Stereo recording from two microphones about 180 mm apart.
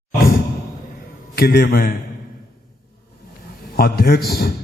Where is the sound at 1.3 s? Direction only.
60° left (ahead or behind).